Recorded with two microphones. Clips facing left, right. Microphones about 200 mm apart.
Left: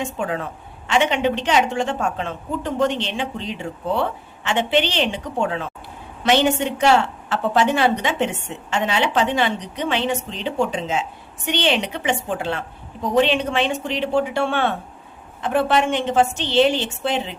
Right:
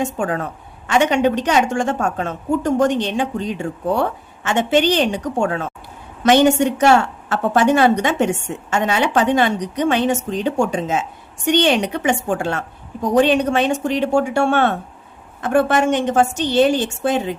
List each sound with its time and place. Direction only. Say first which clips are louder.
0.0 s a woman's voice: right 4 dB; 45° right (ahead or behind)